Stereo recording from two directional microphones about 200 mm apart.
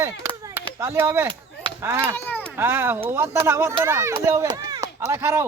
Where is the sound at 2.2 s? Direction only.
10° left (ahead or behind).